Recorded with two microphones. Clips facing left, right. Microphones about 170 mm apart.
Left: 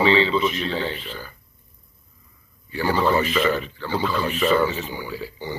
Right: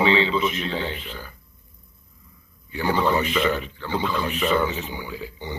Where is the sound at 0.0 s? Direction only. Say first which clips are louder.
Left 2 dB; 15° right (ahead or behind).